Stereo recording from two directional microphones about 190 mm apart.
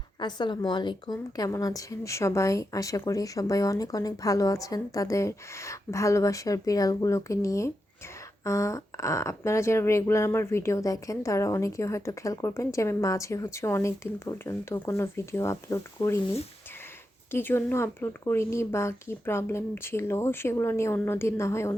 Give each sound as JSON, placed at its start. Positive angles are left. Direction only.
{"t": 0.2, "sound": "speech", "side_deg": 25}
{"t": 17.3, "sound": "speech", "side_deg": 10}